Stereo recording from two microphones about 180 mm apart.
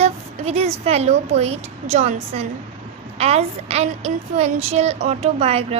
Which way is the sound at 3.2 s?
35° right (ahead or behind).